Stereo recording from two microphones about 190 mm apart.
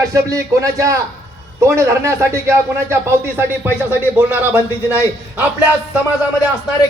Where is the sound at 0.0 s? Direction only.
15° right (ahead or behind).